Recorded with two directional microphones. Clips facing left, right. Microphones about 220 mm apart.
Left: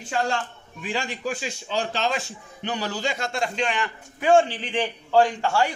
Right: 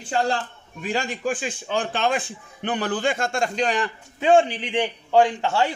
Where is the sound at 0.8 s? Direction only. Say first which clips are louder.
Right 3 dB; 45° right (ahead or behind).